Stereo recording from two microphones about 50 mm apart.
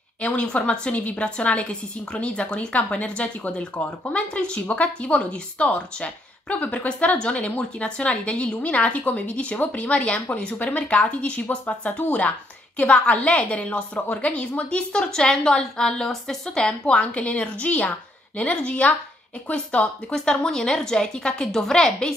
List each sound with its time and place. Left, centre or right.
0.2 s a woman's voice: left
16.8 s a woman's voice: left; by 22.1 s centre